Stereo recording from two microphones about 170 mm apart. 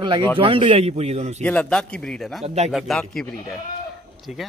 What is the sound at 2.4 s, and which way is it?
Speech, 40° right (ahead or behind).